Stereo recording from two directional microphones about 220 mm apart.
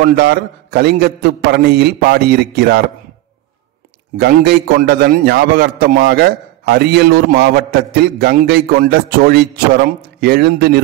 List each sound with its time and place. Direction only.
0.0 s a man's voice: 45° right (ahead or behind)
4.2 s a man's voice: 45° right (ahead or behind)